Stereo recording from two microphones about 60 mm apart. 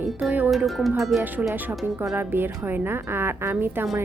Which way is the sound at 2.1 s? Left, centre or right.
Right.